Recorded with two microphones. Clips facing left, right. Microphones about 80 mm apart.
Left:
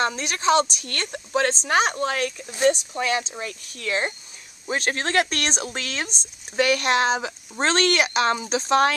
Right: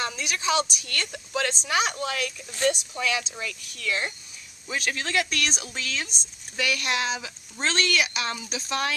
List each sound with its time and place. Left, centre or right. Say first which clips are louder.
0.0 s speech: left 6 dB; left
2.5 s speech: left 5 dB; left